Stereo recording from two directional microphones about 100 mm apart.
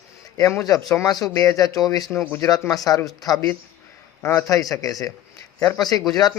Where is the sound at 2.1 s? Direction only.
25° left (ahead or behind).